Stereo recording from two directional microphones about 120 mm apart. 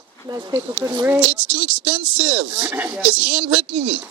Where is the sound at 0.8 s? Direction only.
15° right (ahead or behind).